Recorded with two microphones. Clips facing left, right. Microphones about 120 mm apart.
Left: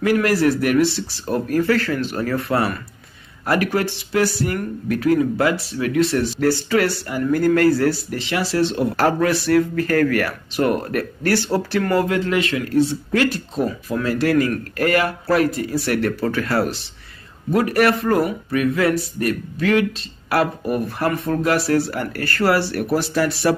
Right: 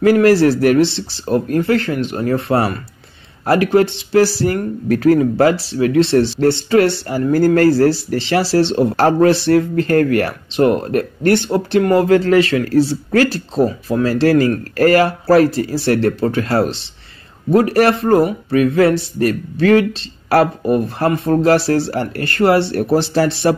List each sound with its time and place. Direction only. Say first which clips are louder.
0.0 s speech: right 6 dB; 30° right (ahead or behind)
12.1 s speech: right 8 dB; 35° right (ahead or behind)